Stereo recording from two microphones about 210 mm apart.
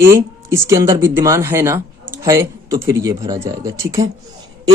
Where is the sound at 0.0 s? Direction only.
15° right (ahead or behind).